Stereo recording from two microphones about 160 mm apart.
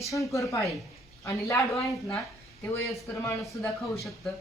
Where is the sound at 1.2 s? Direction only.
20° left (ahead or behind).